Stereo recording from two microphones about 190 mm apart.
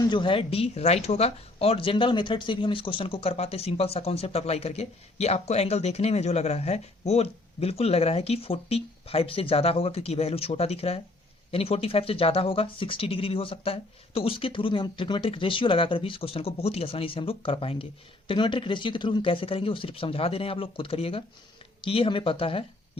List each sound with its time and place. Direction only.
0.1 s speech: 25° left (ahead or behind)